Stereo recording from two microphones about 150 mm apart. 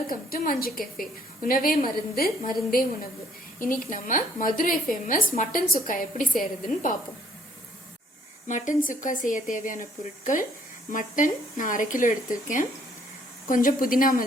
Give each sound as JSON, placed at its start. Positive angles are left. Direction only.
{"t": 0.1, "sound": "a woman's voice", "side_deg": 70}
{"t": 8.4, "sound": "speech", "side_deg": 60}
{"t": 10.9, "sound": "a woman's voice", "side_deg": 60}